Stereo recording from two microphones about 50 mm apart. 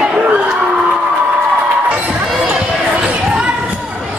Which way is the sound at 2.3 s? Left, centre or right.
Centre.